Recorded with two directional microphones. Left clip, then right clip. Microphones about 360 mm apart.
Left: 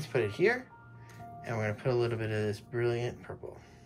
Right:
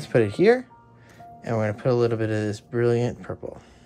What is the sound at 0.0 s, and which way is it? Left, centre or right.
Speech, centre.